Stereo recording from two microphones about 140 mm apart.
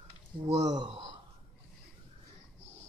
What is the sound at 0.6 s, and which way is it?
Speech, 30° right (ahead or behind).